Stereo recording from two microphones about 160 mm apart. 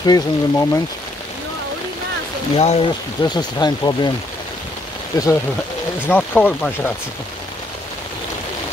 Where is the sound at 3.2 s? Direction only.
25° left (ahead or behind).